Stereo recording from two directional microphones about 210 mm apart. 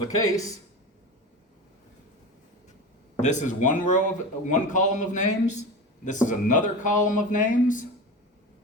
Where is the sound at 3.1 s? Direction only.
35° left (ahead or behind).